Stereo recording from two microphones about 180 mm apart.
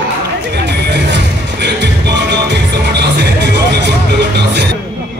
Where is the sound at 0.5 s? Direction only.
70° right (ahead or behind).